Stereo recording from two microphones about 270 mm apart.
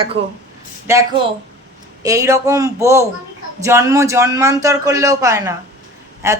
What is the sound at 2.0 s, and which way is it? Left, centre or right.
Speech, centre.